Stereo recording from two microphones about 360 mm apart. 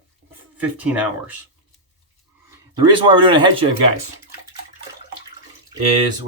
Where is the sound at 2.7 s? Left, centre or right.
Centre.